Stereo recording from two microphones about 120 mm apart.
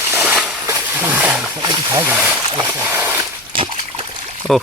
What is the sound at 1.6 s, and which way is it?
Speech, 30° right (ahead or behind).